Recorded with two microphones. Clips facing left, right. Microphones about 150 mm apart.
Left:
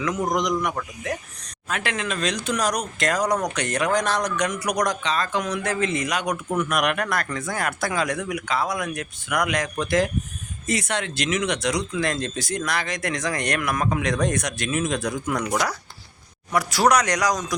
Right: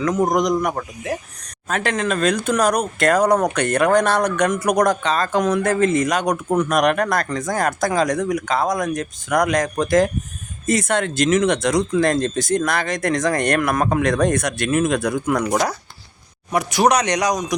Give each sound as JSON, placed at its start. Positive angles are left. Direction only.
{"t": 0.0, "sound": "a man's voice", "side_deg": -40}
{"t": 16.5, "sound": "speech", "side_deg": -20}